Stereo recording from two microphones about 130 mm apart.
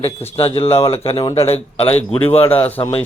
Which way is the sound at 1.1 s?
35° left (ahead or behind).